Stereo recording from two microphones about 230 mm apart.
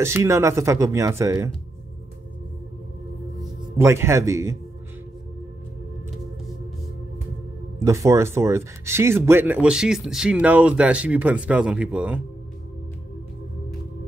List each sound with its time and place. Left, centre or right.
0.0 s speech: centre
3.7 s speech: centre
7.8 s speech: centre